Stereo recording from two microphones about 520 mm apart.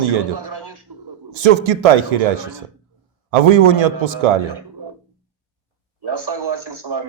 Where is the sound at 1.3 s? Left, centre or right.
Right.